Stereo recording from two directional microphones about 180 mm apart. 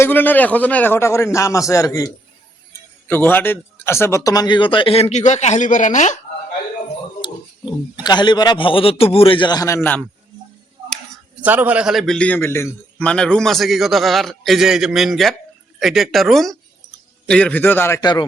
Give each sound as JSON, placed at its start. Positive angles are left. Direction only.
{"t": 0.0, "sound": "a man's voice", "side_deg": 10}
{"t": 7.2, "sound": "a man's voice", "side_deg": 25}
{"t": 10.8, "sound": "tick-tock", "side_deg": 5}
{"t": 11.4, "sound": "a man's voice", "side_deg": -10}